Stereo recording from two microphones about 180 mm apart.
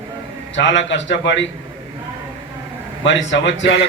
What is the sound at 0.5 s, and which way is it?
Speech, 90° left.